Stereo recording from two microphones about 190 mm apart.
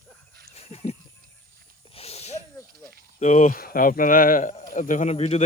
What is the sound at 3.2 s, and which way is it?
Speech, 40° left (ahead or behind).